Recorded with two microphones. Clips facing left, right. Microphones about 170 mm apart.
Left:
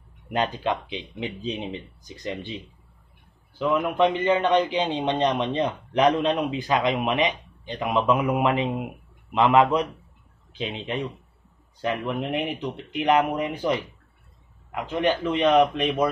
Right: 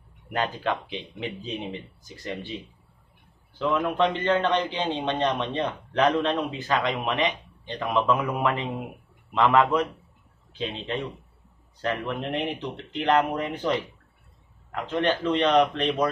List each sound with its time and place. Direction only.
0.3 s a man's voice: 20° left (ahead or behind)